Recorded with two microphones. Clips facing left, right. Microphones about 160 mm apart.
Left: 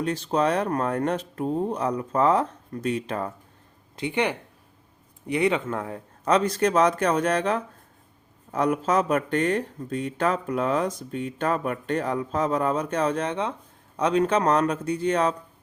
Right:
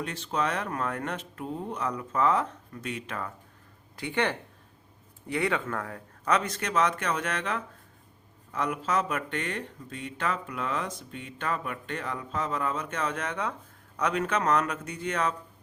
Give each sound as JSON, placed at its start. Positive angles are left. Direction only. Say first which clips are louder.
{"t": 0.0, "sound": "speech", "louder": "left 7 dB", "side_deg": 35}
{"t": 3.9, "sound": "speech", "louder": "left 3 dB", "side_deg": 20}